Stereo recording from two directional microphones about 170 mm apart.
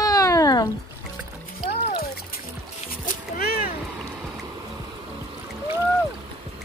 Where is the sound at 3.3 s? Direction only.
65° left (ahead or behind).